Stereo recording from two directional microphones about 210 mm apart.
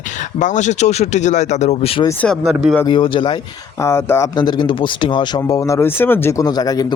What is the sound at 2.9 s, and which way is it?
Speech, 25° left (ahead or behind).